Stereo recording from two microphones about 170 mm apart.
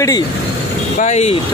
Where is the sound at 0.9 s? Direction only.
40° left (ahead or behind).